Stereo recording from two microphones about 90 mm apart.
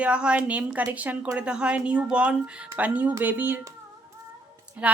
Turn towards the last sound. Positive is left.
turn(degrees=-15)  # may be behind; listen again after turning